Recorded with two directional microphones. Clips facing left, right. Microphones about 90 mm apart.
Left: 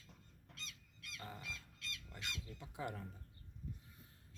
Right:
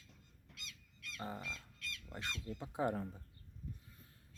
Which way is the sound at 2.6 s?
30° right (ahead or behind).